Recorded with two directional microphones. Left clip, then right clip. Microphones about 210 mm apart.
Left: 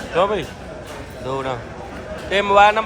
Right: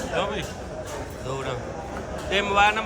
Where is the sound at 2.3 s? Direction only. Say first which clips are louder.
Left 7 dB; 10° right (ahead or behind).